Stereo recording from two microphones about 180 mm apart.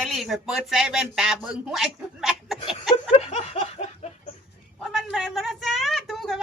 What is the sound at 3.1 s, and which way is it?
Laughter, 35° left (ahead or behind).